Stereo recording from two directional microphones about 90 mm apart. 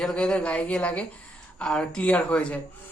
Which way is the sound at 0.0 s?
10° left (ahead or behind).